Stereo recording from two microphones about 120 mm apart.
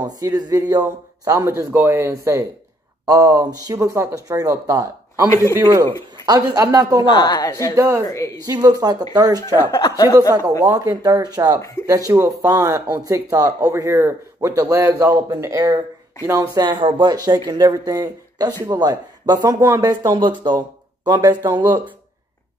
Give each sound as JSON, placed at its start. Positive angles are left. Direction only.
{"t": 0.0, "sound": "a man's voice", "side_deg": -30}
{"t": 7.1, "sound": "a woman's voice", "side_deg": 35}
{"t": 7.7, "sound": "speech", "side_deg": -20}
{"t": 8.1, "sound": "a woman's voice", "side_deg": 25}
{"t": 8.5, "sound": "a man's voice", "side_deg": -30}
{"t": 9.8, "sound": "a woman's voice", "side_deg": 30}
{"t": 10.6, "sound": "a man's voice", "side_deg": -30}
{"t": 16.6, "sound": "a man's voice", "side_deg": -40}
{"t": 21.3, "sound": "speech", "side_deg": -20}